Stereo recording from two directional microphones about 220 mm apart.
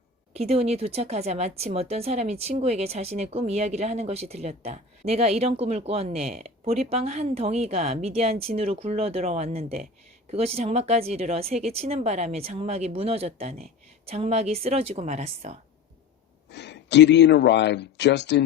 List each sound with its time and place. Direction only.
0.3 s speech: 30° right (ahead or behind)
16.5 s speech: 50° left (ahead or behind)